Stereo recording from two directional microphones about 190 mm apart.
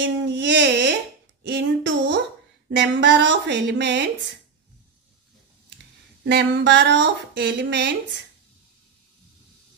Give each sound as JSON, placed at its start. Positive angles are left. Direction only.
{"t": 0.0, "sound": "a sound", "side_deg": -70}
{"t": 2.7, "sound": "speech", "side_deg": -70}
{"t": 6.2, "sound": "speech", "side_deg": -65}